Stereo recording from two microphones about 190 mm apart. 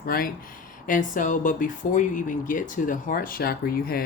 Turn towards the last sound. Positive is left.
turn(degrees=50)  # may be behind; listen again after turning